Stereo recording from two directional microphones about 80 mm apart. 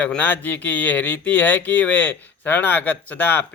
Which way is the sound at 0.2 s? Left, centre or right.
Left.